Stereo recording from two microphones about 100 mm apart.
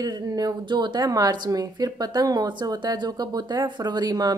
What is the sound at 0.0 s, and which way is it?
Speech, 40° right (ahead or behind).